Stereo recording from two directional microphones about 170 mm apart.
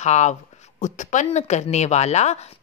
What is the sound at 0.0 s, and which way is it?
A woman's voice, 45° left (ahead or behind).